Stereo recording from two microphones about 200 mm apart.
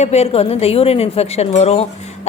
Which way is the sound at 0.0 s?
30° left (ahead or behind).